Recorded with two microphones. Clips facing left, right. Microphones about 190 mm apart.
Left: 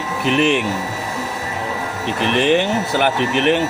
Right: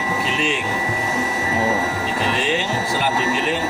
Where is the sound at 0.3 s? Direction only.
60° left (ahead or behind).